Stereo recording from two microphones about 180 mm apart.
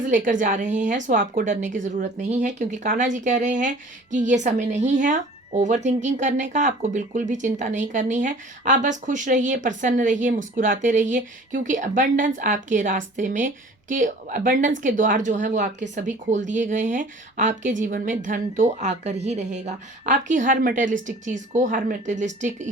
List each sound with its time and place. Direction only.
0.1 s a woman's voice: 45° right (ahead or behind)